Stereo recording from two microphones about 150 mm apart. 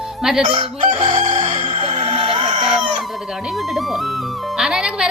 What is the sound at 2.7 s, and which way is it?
Chicken, 5° right (ahead or behind).